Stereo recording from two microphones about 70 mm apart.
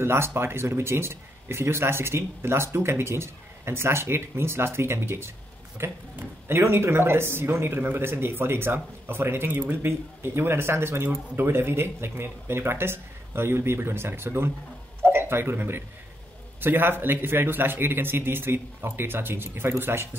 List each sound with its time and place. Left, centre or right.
0.0 s speech: right
15.0 s a sound: right
16.6 s speech: right